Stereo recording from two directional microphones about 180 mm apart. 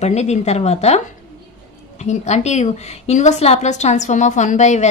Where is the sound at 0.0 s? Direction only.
40° left (ahead or behind).